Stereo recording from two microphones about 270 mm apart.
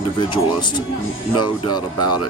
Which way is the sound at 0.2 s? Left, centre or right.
Centre.